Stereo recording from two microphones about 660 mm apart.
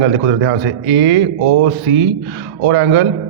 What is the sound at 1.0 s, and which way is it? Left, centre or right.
Speech, centre.